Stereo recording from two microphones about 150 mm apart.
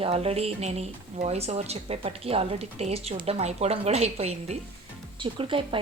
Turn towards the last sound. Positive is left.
turn(degrees=-35)  # may be behind; listen again after turning